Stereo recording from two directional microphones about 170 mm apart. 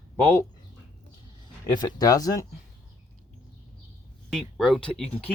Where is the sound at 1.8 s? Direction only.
20° left (ahead or behind).